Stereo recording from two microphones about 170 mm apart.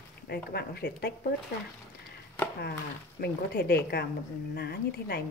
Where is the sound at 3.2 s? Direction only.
65° left (ahead or behind).